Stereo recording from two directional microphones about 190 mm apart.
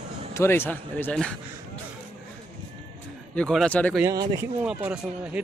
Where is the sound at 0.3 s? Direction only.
10° left (ahead or behind).